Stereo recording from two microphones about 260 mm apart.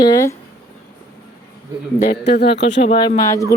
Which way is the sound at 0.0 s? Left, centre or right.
Centre.